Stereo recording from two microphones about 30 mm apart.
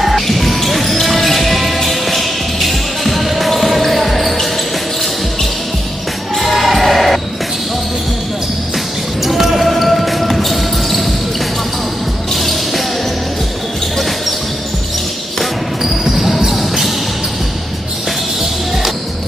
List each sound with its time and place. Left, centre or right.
0.0 s music: centre
6.3 s basketball bounce: centre
9.2 s basketball bounce: centre
12.4 s basketball bounce: centre
15.8 s basketball bounce: centre